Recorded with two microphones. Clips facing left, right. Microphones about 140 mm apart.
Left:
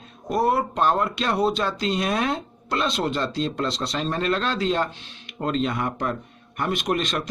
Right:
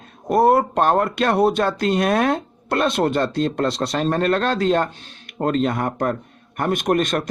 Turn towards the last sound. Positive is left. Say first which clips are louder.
# right 5 dB
turn(degrees=-50)  # may be behind; listen again after turning